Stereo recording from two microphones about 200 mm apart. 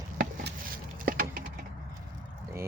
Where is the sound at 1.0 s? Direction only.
45° right (ahead or behind).